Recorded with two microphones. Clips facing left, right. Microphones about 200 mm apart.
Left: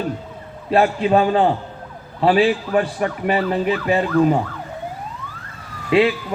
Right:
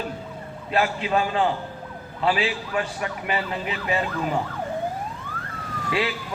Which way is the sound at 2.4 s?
50° left (ahead or behind).